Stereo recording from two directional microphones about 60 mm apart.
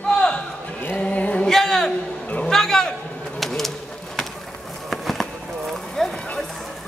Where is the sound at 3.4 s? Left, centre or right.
Centre.